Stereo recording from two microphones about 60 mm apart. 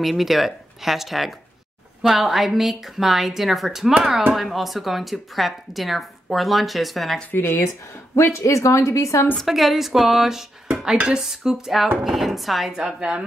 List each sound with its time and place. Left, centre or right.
0.0 s a woman's voice: centre
7.2 s speech: left
8.2 s speech: left
9.4 s a woman's voice: centre
11.0 s a sound: centre
12.0 s a woman's voice: centre
12.7 s a sound: centre